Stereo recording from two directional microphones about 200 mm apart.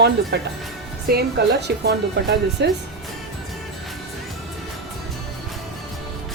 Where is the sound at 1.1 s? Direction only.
50° right (ahead or behind).